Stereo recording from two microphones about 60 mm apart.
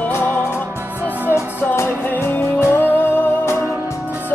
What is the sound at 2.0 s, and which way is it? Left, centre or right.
Music, left.